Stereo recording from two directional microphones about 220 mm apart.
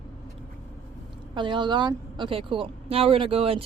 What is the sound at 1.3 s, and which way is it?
Speech, 20° right (ahead or behind).